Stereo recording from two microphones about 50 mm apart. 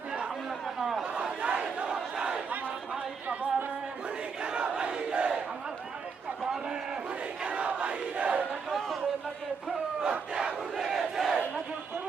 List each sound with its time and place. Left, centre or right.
0.8 s chatter: centre
1.0 s crowd: right
2.1 s battle cry: centre
3.2 s a sound: right
4.4 s battle cry: right
6.4 s a sound: centre
7.4 s battle cry: right
10.0 s crowd: centre
10.8 s battle cry: centre